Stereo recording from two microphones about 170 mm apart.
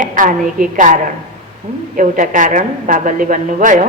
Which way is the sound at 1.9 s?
50° right (ahead or behind).